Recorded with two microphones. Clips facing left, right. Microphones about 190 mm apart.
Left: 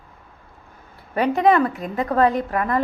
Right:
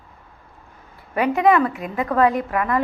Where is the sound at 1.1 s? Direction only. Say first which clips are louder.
Even; 35° left (ahead or behind).